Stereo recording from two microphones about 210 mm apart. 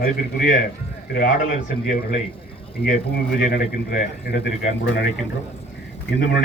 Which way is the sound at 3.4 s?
45° left (ahead or behind).